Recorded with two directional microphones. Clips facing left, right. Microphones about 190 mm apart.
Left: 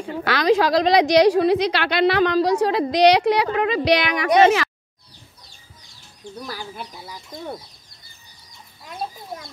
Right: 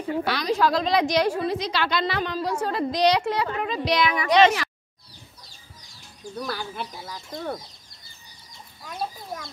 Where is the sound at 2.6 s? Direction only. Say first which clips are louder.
Left 3 dB; 75° left (ahead or behind).